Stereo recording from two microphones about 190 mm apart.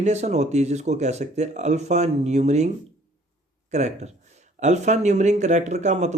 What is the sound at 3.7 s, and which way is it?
A man's voice, 35° right (ahead or behind).